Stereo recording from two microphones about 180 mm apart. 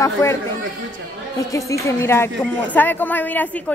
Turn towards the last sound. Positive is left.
turn(degrees=10)  # may be behind; listen again after turning